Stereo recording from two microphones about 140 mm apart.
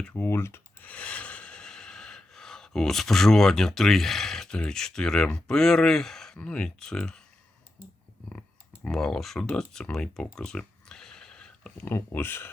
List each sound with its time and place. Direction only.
0.1 s speech: 15° left (ahead or behind)
8.9 s speech: 5° left (ahead or behind)
11.9 s speech: 15° left (ahead or behind)